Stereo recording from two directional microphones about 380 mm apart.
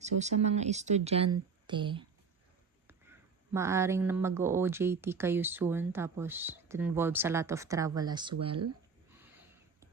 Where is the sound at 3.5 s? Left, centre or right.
Centre.